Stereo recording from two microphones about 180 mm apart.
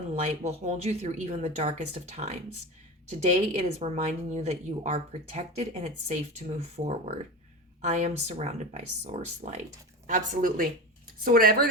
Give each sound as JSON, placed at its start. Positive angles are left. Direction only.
{"t": 0.2, "sound": "speech", "side_deg": -40}